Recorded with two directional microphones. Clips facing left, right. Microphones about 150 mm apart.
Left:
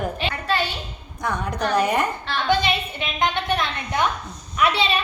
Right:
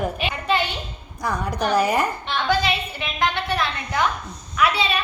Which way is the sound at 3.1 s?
25° left (ahead or behind).